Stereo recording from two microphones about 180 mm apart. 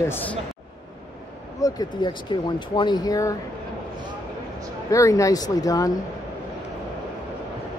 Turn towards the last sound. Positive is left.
turn(degrees=20)  # may be behind; listen again after turning